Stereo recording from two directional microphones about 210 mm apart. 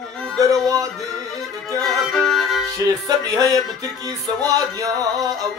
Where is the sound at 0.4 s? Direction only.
15° right (ahead or behind).